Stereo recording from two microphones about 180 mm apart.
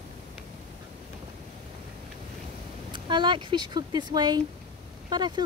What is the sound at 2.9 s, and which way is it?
Speech, 25° right (ahead or behind).